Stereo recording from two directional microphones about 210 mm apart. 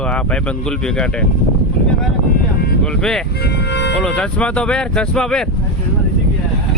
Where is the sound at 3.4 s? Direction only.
55° left (ahead or behind).